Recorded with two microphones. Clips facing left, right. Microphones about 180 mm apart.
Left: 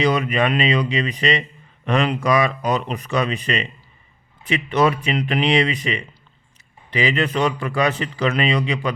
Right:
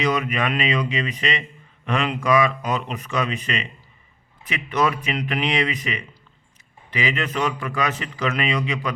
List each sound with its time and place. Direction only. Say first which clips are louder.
0.0 s a man's voice: left 4 dB; 30° left (ahead or behind)